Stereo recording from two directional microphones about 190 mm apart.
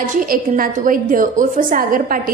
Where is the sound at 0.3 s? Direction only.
45° right (ahead or behind).